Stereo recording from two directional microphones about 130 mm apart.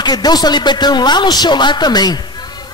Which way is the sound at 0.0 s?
30° left (ahead or behind).